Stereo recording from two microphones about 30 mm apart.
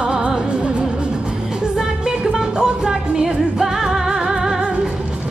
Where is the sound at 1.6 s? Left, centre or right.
Right.